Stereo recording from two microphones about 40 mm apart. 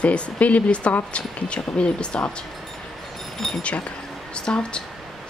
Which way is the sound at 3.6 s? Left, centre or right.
Left.